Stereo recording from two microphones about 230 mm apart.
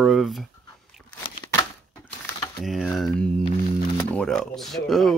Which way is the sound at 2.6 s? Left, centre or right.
Centre.